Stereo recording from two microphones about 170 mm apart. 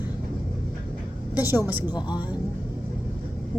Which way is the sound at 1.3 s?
10° right (ahead or behind).